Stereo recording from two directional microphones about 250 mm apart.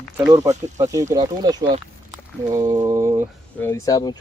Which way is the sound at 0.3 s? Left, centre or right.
Centre.